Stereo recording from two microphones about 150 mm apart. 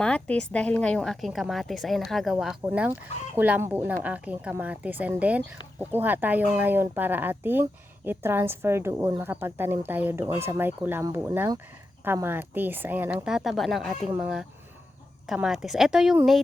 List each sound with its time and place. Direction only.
0.0 s a woman's voice: 10° left (ahead or behind)